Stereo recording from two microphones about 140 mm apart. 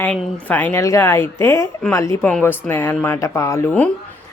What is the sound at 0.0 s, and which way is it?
Speech, 10° left (ahead or behind).